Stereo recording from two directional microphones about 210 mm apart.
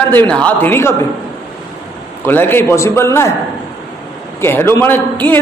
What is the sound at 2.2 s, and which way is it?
A man's voice, 10° left (ahead or behind).